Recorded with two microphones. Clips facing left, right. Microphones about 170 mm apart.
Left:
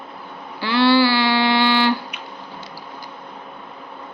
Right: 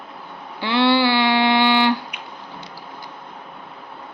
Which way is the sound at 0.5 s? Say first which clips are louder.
Left 2 dB; 20° right (ahead or behind).